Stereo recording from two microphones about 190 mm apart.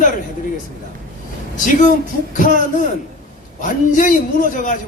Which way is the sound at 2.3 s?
40° left (ahead or behind).